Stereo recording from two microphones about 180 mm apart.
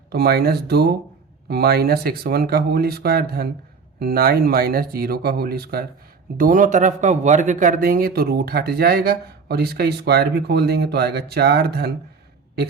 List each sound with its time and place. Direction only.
0.1 s speech: 60° right (ahead or behind)
6.3 s speech: 50° right (ahead or behind)